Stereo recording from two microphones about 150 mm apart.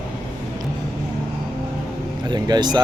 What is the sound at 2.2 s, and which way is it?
Vehicle, 30° right (ahead or behind).